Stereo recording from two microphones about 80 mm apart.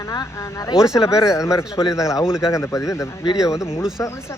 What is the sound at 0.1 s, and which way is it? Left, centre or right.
Speech, left.